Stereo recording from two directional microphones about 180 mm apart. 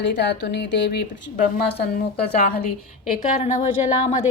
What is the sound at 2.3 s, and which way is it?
Speech, 60° left (ahead or behind).